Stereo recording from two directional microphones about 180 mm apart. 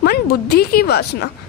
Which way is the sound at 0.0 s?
60° left (ahead or behind).